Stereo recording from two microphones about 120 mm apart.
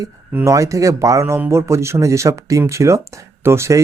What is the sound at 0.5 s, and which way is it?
Speech, 25° right (ahead or behind).